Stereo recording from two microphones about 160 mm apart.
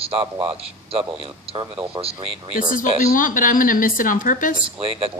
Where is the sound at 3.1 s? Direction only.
55° left (ahead or behind).